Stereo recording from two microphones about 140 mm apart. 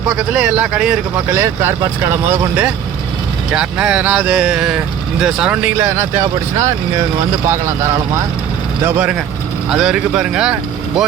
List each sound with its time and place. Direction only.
0.1 s speech: 5° right (ahead or behind)
8.8 s speech: 10° right (ahead or behind)